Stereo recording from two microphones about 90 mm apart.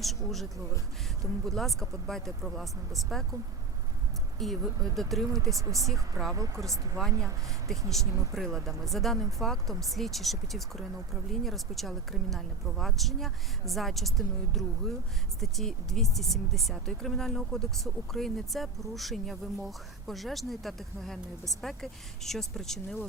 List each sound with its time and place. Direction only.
0.0 s speech: centre (ahead or behind)
4.4 s speech: centre (ahead or behind)
6.3 s speech: 35° right (ahead or behind)
7.7 s speech: 5° left (ahead or behind)